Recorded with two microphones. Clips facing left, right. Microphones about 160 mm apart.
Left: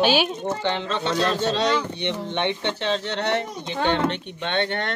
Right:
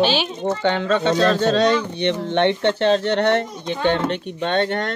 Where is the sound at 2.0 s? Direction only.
60° right (ahead or behind).